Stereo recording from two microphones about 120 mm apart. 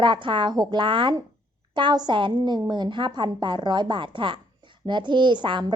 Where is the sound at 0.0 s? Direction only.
40° right (ahead or behind).